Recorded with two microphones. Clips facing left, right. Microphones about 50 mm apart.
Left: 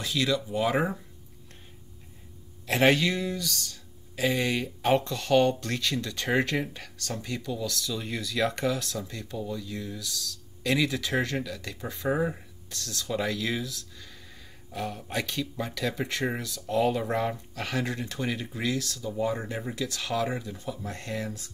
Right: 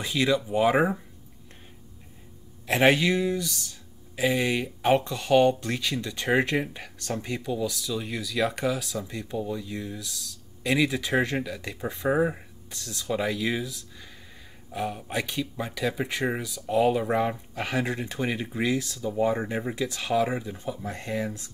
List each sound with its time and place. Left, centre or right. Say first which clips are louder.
0.0 s speech: right 3 dB; right
2.6 s speech: right 2 dB; centre